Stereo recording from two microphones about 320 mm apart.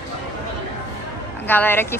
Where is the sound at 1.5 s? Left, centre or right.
Centre.